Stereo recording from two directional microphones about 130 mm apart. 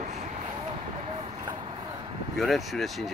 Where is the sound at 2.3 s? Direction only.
Centre (ahead or behind).